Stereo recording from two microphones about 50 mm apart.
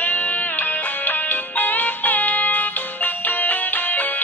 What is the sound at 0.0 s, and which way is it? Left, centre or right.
Music, left.